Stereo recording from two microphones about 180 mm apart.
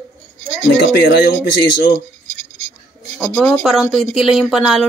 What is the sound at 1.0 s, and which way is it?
Speech, 65° left (ahead or behind).